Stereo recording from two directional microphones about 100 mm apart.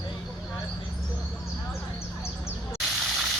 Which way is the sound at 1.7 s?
25° left (ahead or behind).